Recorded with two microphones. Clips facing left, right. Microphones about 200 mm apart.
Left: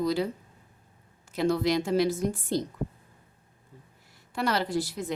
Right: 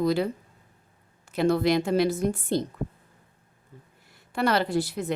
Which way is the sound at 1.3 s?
60° right (ahead or behind).